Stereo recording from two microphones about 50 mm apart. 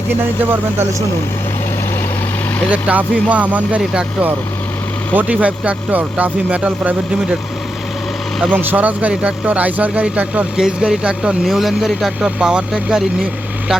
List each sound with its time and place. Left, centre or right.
2.6 s speech: right
5.1 s speech: right
8.5 s speech: right
10.6 s speech: centre
11.4 s speech: centre
12.2 s speech: centre